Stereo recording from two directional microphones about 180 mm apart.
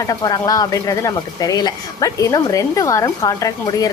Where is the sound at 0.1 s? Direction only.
20° left (ahead or behind).